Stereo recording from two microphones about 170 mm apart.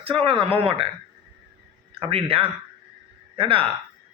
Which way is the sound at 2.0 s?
35° right (ahead or behind).